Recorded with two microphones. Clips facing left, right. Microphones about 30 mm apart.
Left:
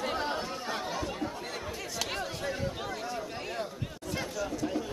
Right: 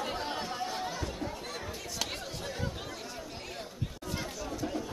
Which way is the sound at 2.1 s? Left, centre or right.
Centre.